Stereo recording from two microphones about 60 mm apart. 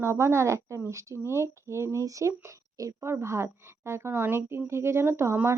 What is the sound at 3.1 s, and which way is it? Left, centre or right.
Speech, right.